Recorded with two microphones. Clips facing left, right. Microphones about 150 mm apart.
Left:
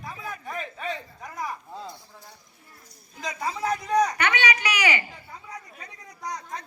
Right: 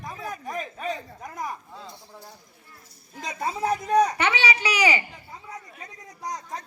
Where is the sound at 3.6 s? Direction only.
30° right (ahead or behind).